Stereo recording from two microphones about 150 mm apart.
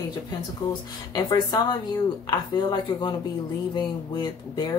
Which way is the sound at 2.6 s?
30° left (ahead or behind).